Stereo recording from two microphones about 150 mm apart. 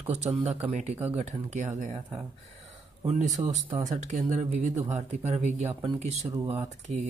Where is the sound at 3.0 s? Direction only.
50° right (ahead or behind).